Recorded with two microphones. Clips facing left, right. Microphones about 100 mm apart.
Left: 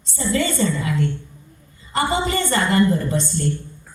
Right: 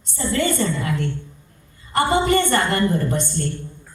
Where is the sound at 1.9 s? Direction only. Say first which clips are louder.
Right 3 dB; 55° right (ahead or behind).